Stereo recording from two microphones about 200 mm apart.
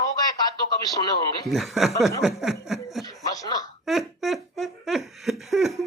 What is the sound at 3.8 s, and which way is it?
Speech, centre (ahead or behind).